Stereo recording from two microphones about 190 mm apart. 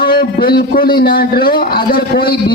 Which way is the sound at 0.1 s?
50° left (ahead or behind).